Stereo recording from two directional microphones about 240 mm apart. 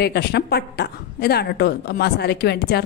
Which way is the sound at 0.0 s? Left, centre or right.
Left.